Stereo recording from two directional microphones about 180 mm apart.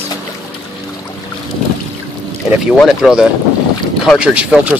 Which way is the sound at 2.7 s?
Centre (ahead or behind).